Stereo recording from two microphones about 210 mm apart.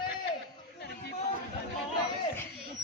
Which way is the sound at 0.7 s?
50° left (ahead or behind).